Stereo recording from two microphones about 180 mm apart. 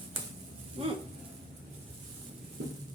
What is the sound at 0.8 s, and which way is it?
Speech, 35° right (ahead or behind).